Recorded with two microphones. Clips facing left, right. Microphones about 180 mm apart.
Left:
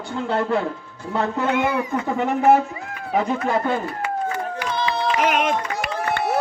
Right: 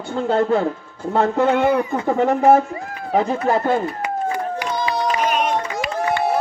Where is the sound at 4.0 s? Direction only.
15° right (ahead or behind).